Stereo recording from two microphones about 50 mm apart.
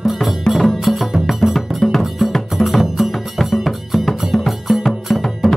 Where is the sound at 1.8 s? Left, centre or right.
Centre.